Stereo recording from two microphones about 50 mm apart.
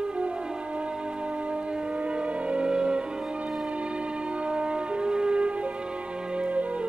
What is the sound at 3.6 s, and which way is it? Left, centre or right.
Siren, right.